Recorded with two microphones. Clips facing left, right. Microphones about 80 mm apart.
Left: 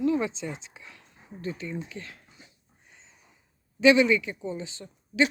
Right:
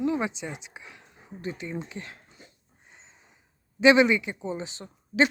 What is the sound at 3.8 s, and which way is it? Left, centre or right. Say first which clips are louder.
Speech: right 1 dB; right.